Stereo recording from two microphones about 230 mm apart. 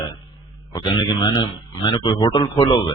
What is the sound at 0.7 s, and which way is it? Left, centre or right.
Speech, centre.